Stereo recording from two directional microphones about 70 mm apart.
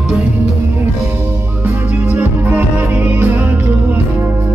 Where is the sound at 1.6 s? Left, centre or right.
Centre.